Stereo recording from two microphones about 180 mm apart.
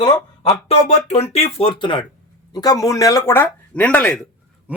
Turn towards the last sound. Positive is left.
turn(degrees=-5)  # may be behind; listen again after turning